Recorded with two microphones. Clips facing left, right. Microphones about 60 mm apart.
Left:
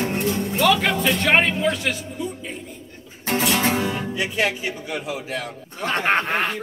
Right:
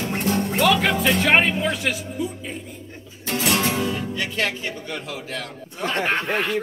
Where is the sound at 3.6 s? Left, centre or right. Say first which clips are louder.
Left 1 dB; left.